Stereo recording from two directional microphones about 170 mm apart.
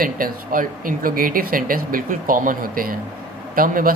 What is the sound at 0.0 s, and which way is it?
Speech, 55° right (ahead or behind).